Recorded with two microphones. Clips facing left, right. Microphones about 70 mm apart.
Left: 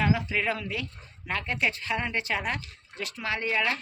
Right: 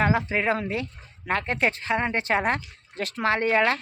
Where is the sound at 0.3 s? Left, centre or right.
Right.